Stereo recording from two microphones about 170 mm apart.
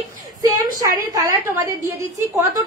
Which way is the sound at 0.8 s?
20° right (ahead or behind).